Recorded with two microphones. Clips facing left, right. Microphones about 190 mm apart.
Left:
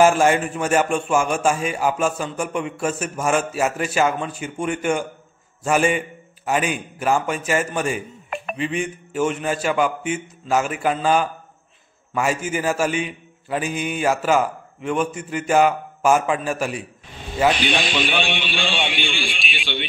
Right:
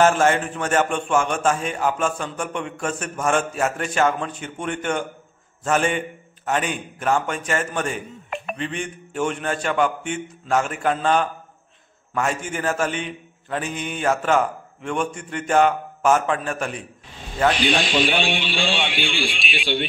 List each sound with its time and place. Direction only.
0.0 s a man's voice: 10° left (ahead or behind)
18.2 s a man's voice: 55° left (ahead or behind)
18.9 s a man's voice: 5° right (ahead or behind)